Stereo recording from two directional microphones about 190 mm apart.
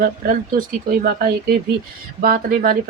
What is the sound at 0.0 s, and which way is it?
Speech, 45° right (ahead or behind).